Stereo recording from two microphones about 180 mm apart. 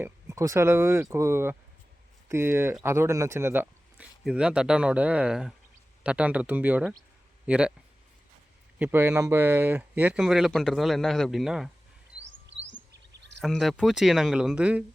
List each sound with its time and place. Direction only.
0.0 s speech: 15° right (ahead or behind)
8.8 s speech: 10° right (ahead or behind)
12.2 s rodents: 85° right
13.4 s speech: centre (ahead or behind)